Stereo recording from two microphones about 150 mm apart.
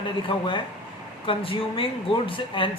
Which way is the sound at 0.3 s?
35° left (ahead or behind).